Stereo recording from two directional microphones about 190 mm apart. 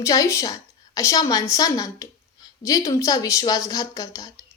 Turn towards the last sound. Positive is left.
turn(degrees=20)  # may be behind; listen again after turning